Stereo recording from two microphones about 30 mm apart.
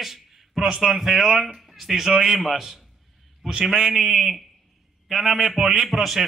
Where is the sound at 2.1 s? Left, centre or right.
Right.